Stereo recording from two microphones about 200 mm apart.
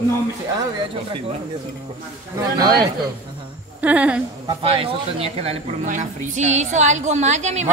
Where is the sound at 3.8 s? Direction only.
5° right (ahead or behind).